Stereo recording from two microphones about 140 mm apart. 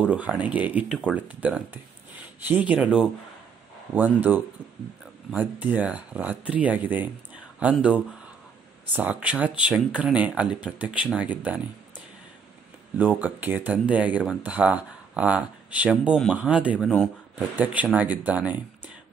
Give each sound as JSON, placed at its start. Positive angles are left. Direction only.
{"t": 0.0, "sound": "speech", "side_deg": -10}
{"t": 12.9, "sound": "speech", "side_deg": -10}